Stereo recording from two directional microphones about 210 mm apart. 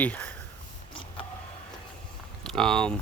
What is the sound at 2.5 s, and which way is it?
Speech, centre (ahead or behind).